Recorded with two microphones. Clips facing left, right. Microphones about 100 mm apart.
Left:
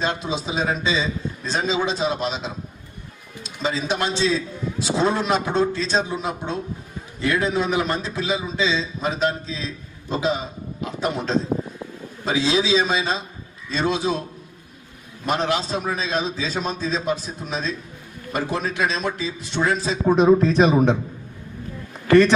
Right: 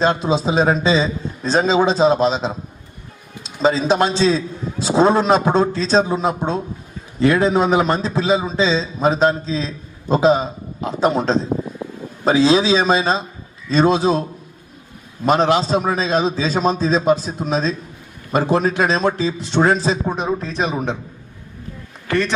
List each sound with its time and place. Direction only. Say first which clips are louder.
0.0 s a man's voice: right 8 dB; 35° right (ahead or behind)
20.1 s speech: left 7 dB; 15° right (ahead or behind)